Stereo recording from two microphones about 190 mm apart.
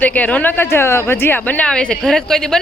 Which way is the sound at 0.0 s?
10° left (ahead or behind).